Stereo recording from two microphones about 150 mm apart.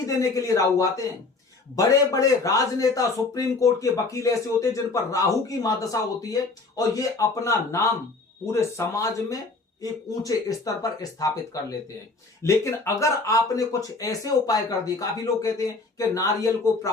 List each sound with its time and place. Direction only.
0.2 s a man's voice: 20° left (ahead or behind)